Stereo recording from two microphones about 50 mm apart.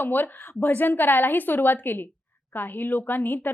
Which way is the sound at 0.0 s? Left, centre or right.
Left.